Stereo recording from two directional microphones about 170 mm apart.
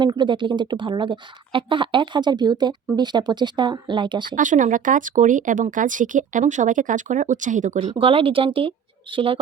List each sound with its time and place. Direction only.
0.0 s speech: 25° right (ahead or behind)
4.4 s speech: 50° right (ahead or behind)
7.9 s speech: 30° right (ahead or behind)